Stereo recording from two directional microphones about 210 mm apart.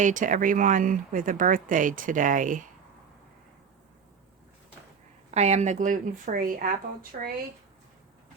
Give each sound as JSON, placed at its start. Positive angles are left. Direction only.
{"t": 0.0, "sound": "speech", "side_deg": -40}
{"t": 5.3, "sound": "speech", "side_deg": -30}